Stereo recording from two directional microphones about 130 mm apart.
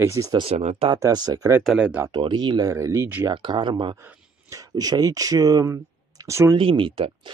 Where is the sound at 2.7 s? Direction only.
25° right (ahead or behind).